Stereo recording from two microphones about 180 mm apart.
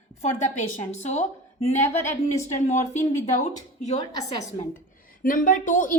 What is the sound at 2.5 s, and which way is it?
A woman's voice, 40° left (ahead or behind).